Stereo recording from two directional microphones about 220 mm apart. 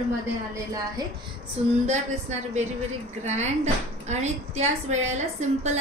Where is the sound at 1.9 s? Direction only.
30° right (ahead or behind).